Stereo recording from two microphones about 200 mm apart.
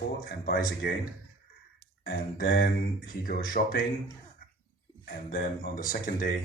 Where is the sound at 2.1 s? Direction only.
45° left (ahead or behind).